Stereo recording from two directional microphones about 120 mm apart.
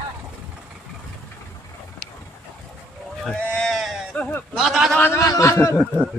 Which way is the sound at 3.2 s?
10° left (ahead or behind).